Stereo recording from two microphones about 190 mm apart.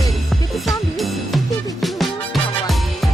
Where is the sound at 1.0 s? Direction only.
Centre (ahead or behind).